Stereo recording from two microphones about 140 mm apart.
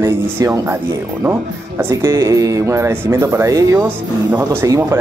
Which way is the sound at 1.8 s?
20° right (ahead or behind).